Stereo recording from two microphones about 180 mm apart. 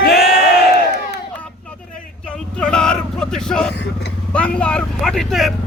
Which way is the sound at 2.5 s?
5° left (ahead or behind).